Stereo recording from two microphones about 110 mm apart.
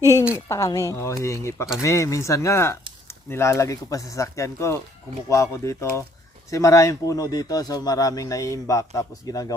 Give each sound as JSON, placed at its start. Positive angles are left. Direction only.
{"t": 0.3, "sound": "speech", "side_deg": 25}